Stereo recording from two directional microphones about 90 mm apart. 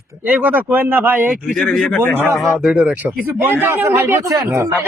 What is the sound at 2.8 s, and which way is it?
Speech, 15° right (ahead or behind).